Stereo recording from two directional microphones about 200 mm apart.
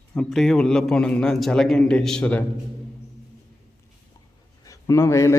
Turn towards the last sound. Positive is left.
turn(degrees=15)  # may be behind; listen again after turning